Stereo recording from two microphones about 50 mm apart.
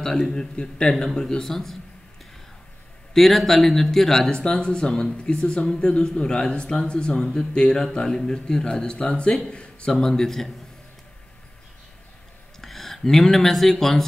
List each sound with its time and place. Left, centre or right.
0.0 s speech: centre
0.9 s speech: centre
3.2 s speech: centre
4.3 s speech: centre
7.2 s speech: centre
12.5 s speech: centre